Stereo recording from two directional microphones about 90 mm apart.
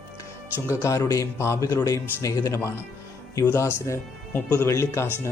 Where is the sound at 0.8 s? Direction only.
40° left (ahead or behind).